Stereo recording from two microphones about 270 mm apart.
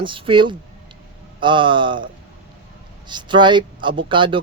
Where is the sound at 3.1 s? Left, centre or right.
Centre.